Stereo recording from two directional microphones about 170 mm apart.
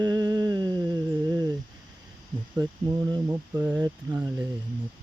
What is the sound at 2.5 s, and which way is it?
Speech, 20° right (ahead or behind).